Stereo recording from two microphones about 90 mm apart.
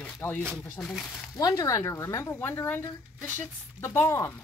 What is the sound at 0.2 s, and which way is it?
Speech, 30° left (ahead or behind).